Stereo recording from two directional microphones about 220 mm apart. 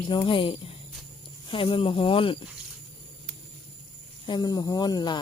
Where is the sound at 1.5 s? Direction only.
25° left (ahead or behind).